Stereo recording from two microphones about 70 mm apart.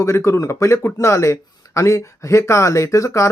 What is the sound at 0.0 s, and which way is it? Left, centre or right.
Speech, left.